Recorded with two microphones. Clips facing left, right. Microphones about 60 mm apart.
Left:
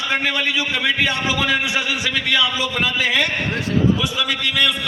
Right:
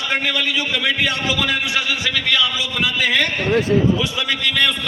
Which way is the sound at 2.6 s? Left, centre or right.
Left.